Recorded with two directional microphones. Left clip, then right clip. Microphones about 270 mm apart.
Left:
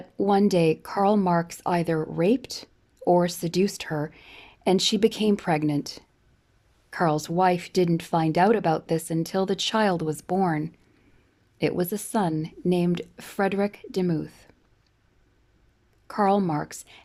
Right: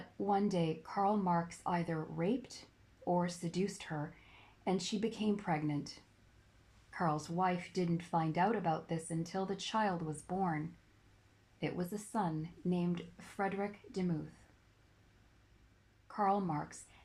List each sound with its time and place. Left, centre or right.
0.2 s speech: left
11.6 s speech: left
16.0 s speech: left